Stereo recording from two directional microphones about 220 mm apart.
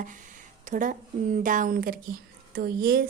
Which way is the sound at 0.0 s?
35° right (ahead or behind).